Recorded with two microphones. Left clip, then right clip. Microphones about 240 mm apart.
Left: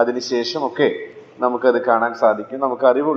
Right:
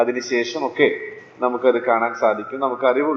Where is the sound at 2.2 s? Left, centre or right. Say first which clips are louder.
Left 2 dB; left.